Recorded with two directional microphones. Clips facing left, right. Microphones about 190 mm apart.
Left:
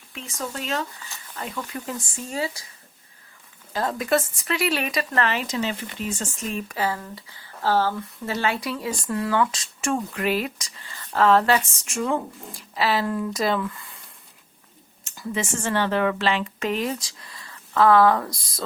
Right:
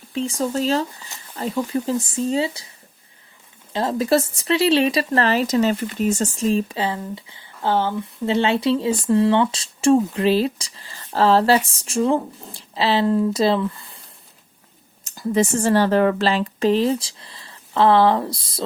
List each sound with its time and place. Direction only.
0.1 s speech: 30° right (ahead or behind)
3.7 s speech: 25° right (ahead or behind)
15.0 s speech: 40° right (ahead or behind)